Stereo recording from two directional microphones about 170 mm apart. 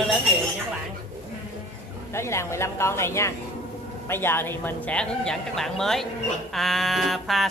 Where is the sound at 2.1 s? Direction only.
15° left (ahead or behind).